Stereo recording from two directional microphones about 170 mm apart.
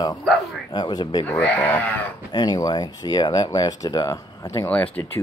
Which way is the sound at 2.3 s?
25° left (ahead or behind).